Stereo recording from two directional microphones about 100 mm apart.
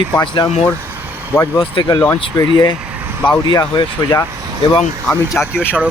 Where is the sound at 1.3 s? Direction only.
25° left (ahead or behind).